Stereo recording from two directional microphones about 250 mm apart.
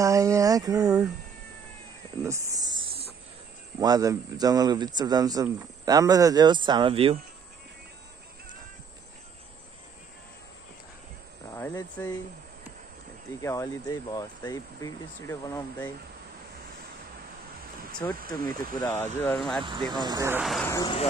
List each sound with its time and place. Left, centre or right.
0.0 s a sound: centre
2.2 s cricket: centre
3.8 s speech: centre
11.5 s speech: centre
13.4 s speech: centre
18.0 s speech: centre
19.9 s speech: centre
20.6 s speech: centre